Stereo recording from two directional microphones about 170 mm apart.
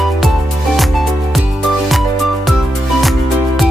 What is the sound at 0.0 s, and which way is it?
Music, centre (ahead or behind).